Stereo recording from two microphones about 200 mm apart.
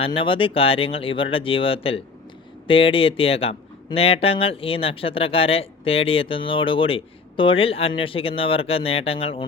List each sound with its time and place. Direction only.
0.2 s speech: 25° left (ahead or behind)